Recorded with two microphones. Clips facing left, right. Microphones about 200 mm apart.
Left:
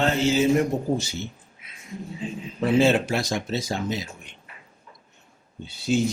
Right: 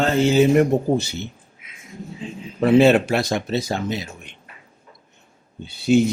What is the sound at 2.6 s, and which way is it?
Speech, 65° right (ahead or behind).